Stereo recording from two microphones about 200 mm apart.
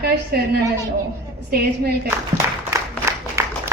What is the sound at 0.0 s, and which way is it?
A man's voice, 50° right (ahead or behind).